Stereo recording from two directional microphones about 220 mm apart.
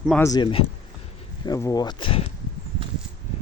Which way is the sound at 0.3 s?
20° left (ahead or behind).